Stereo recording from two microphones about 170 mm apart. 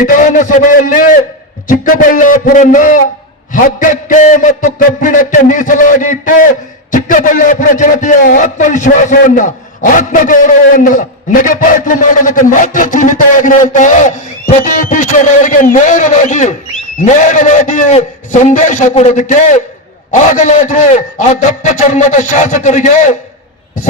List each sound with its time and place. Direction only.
0.0 s a man's voice: 50° left (ahead or behind)